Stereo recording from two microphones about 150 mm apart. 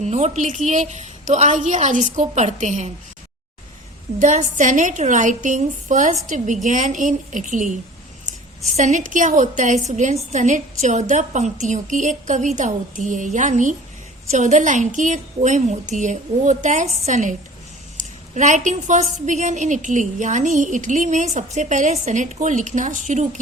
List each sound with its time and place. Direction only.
0.0 s a woman's voice: 50° right (ahead or behind)
4.2 s a woman's voice: 55° right (ahead or behind)